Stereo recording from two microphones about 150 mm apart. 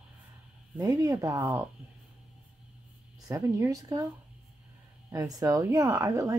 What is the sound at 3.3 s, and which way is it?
Speech, 20° right (ahead or behind).